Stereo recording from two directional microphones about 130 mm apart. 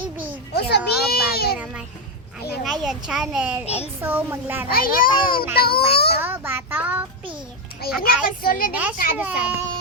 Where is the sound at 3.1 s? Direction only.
5° right (ahead or behind).